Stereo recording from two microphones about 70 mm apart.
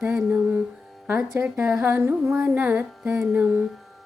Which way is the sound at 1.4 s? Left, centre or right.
Right.